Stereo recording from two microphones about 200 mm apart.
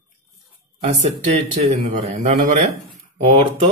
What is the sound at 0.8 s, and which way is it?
Speech, 30° right (ahead or behind).